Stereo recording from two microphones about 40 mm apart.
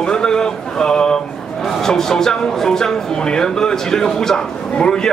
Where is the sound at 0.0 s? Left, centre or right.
Centre.